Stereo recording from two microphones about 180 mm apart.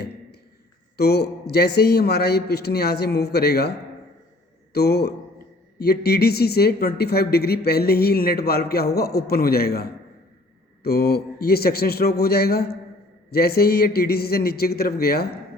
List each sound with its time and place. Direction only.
0.9 s speech: 65° left (ahead or behind)
4.7 s a man's voice: 60° left (ahead or behind)
10.8 s speech: 60° left (ahead or behind)